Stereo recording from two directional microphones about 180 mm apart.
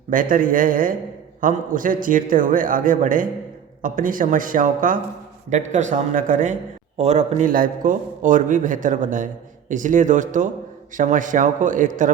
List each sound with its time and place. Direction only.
0.1 s a man's voice: 50° right (ahead or behind)